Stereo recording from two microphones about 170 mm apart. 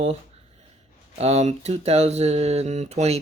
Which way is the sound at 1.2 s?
40° right (ahead or behind).